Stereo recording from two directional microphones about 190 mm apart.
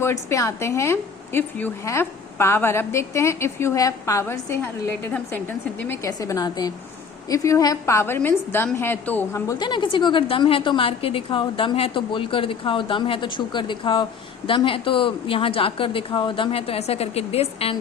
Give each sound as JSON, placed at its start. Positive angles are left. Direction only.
{"t": 0.0, "sound": "a woman's voice", "side_deg": 15}